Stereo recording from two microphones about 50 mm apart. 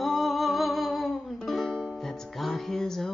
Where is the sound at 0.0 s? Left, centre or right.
Centre.